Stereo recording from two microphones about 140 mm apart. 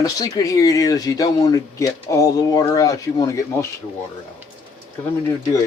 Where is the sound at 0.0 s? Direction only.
25° left (ahead or behind).